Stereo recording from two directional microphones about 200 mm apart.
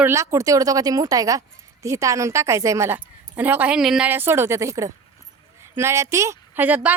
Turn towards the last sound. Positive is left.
turn(degrees=-10)  # may be behind; listen again after turning